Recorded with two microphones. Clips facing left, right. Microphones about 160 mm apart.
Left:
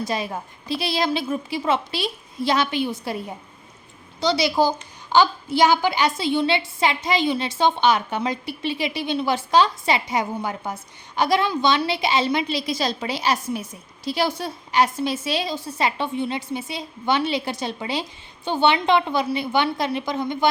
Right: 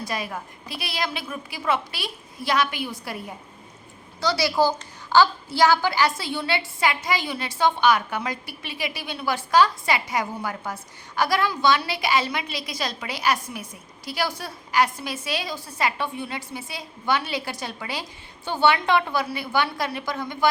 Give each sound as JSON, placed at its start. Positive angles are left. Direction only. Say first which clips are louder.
{"t": 0.1, "sound": "a woman's voice", "louder": "left 4 dB", "side_deg": 25}